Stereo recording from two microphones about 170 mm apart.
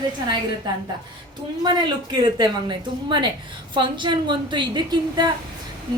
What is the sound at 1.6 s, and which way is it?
A woman's voice, 25° right (ahead or behind).